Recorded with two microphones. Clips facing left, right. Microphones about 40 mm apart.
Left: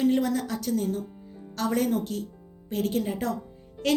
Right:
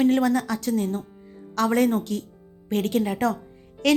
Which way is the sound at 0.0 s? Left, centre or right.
Right.